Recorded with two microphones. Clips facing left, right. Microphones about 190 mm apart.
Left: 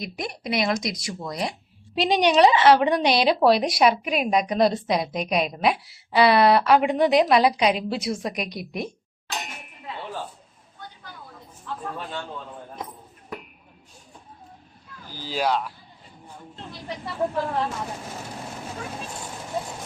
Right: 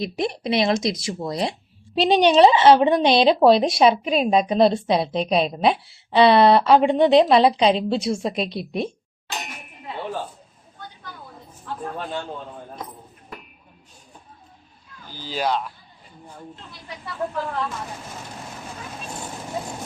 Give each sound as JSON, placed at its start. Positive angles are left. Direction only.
{"t": 0.0, "sound": "speech", "side_deg": -25}
{"t": 15.2, "sound": "speech", "side_deg": 5}
{"t": 17.1, "sound": "speech", "side_deg": 30}